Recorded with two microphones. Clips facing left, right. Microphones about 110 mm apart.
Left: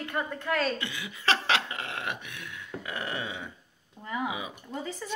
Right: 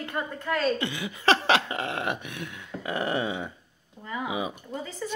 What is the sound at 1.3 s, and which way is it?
Speech, 20° right (ahead or behind).